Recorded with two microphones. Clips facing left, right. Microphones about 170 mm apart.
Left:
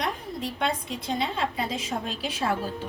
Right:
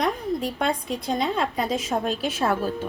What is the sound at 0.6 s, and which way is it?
A woman's voice, 45° right (ahead or behind).